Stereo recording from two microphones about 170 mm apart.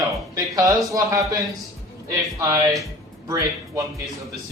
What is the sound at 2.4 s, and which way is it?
Speech, 20° right (ahead or behind).